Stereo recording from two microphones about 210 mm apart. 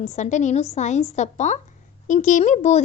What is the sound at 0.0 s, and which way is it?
A woman's voice, 35° left (ahead or behind).